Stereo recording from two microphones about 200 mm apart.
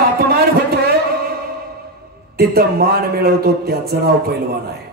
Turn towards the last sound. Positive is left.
turn(degrees=-50)  # may be behind; listen again after turning